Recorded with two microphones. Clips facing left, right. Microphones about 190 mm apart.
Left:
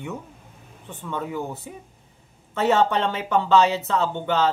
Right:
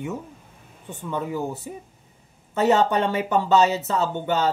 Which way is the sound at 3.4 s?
5° right (ahead or behind).